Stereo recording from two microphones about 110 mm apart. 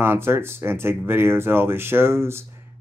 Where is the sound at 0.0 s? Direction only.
20° right (ahead or behind).